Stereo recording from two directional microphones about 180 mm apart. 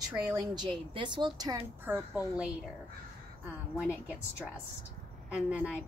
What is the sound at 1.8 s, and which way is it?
Speech, 10° right (ahead or behind).